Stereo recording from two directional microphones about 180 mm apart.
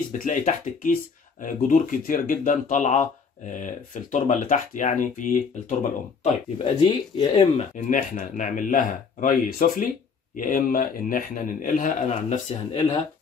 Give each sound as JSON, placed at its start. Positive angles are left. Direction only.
{"t": 0.2, "sound": "a man's voice", "side_deg": 45}
{"t": 6.9, "sound": "speech", "side_deg": 30}
{"t": 7.7, "sound": "a man's voice", "side_deg": 45}